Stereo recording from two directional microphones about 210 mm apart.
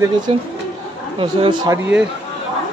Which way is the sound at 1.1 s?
20° right (ahead or behind).